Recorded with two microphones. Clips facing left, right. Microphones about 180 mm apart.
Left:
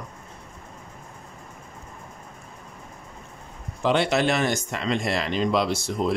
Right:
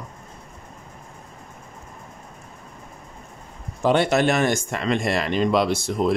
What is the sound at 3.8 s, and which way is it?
Speech, 45° right (ahead or behind).